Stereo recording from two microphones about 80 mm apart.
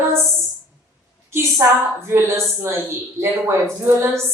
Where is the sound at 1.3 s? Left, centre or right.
Right.